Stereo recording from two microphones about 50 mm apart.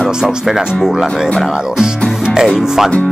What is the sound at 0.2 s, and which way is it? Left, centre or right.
Speech, centre.